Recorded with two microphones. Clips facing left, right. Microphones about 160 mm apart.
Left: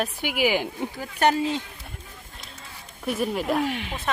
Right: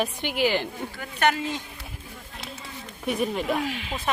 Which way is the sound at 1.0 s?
35° left (ahead or behind).